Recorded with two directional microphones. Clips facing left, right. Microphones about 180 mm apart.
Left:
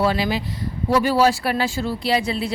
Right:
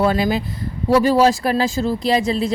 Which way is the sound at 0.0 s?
45° right (ahead or behind).